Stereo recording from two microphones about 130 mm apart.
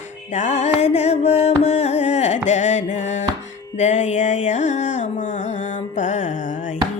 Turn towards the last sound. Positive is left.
turn(degrees=70)  # may be behind; listen again after turning